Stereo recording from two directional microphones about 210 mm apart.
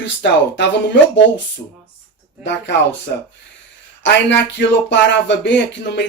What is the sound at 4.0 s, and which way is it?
Speech, 55° left (ahead or behind).